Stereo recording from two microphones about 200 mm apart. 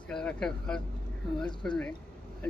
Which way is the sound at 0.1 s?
5° left (ahead or behind).